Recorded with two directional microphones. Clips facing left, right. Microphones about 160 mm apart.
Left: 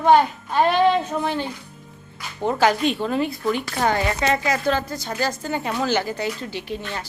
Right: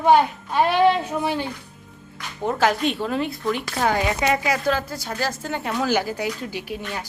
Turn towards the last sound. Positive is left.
turn(degrees=-10)  # may be behind; listen again after turning